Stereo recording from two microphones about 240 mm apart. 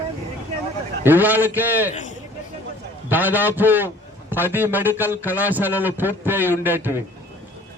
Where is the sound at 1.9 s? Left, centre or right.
Left.